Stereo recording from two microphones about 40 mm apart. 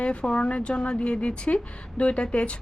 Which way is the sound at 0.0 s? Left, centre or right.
Left.